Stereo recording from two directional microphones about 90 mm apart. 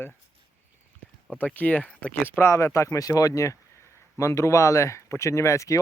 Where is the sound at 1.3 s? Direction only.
15° left (ahead or behind).